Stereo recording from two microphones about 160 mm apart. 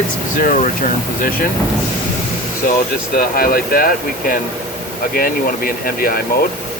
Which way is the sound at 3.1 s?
65° left (ahead or behind).